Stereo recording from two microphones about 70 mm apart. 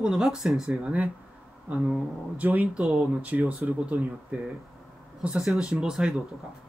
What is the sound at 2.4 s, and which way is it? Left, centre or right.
Speech, right.